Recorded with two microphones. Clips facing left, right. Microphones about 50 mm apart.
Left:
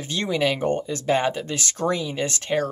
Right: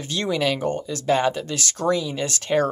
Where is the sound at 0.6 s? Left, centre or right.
Left.